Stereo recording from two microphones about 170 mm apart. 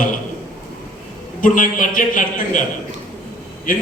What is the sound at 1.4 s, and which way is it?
A man's voice, 55° left (ahead or behind).